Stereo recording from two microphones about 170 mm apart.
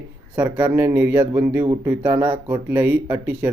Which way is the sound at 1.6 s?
25° right (ahead or behind).